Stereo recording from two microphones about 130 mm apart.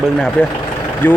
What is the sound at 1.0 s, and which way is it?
Speech, 15° left (ahead or behind).